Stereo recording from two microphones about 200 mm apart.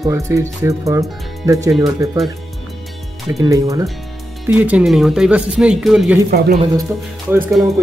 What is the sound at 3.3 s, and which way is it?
Speech, 15° right (ahead or behind).